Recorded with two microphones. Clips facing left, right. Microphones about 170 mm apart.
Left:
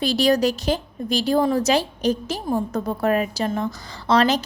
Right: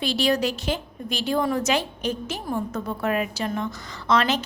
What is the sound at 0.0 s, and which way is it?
A woman's voice, 40° left (ahead or behind).